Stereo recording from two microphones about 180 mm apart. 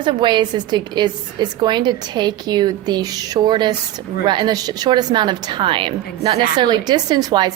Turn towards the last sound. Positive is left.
turn(degrees=-20)  # may be behind; listen again after turning